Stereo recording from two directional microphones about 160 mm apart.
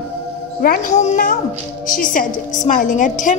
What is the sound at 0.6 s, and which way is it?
A woman's voice, 60° left (ahead or behind).